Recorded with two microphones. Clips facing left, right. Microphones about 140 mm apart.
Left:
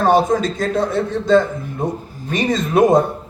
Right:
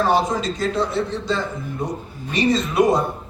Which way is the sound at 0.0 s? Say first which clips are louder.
Left 5 dB; 50° left (ahead or behind).